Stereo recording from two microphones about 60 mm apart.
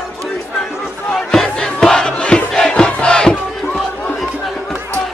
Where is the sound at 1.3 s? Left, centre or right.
Centre.